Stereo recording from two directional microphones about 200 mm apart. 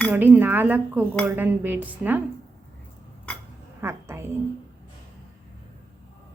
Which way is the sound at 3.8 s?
10° right (ahead or behind).